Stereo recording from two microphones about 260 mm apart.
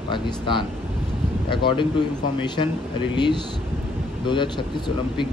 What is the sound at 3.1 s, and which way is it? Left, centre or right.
Speech, centre.